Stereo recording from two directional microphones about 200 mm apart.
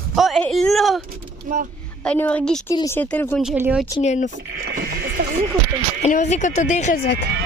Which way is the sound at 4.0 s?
35° left (ahead or behind).